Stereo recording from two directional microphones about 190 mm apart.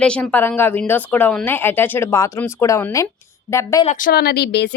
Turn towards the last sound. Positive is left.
turn(degrees=60)  # may be behind; listen again after turning